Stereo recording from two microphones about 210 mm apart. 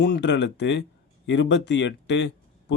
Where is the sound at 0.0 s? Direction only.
55° left (ahead or behind).